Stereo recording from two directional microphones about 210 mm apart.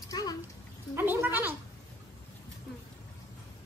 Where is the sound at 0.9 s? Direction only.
10° right (ahead or behind).